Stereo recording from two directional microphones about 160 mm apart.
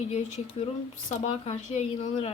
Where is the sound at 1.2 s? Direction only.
45° left (ahead or behind).